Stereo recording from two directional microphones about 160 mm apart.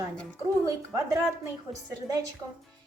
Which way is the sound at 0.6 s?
20° right (ahead or behind).